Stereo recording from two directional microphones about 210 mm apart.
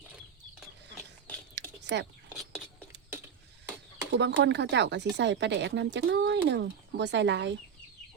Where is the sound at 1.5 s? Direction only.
55° right (ahead or behind).